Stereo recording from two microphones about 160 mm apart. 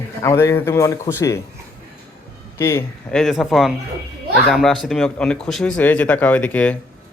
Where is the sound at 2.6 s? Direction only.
15° left (ahead or behind).